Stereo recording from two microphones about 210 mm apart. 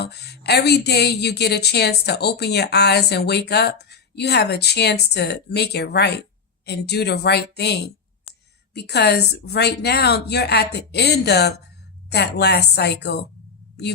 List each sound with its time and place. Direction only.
0.0 s speech: 50° left (ahead or behind)